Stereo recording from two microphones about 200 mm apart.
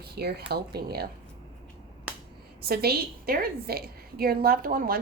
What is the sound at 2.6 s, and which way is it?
A woman's voice, 50° right (ahead or behind).